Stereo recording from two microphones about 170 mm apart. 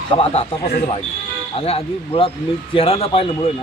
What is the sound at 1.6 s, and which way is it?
Speech, 35° left (ahead or behind).